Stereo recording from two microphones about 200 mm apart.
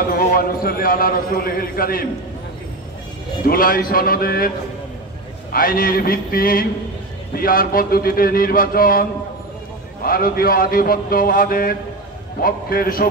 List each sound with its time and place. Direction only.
0.1 s a man's voice: 45° left (ahead or behind)
3.4 s a man's voice: 45° left (ahead or behind)
5.5 s a man's voice: 45° left (ahead or behind)
10.0 s a man's voice: 45° left (ahead or behind)